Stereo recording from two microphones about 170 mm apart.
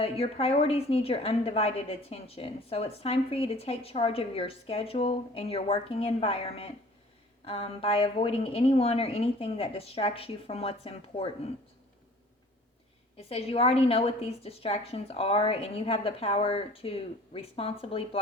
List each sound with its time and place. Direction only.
0.0 s a woman's voice: 35° left (ahead or behind)
13.1 s a woman's voice: 35° left (ahead or behind)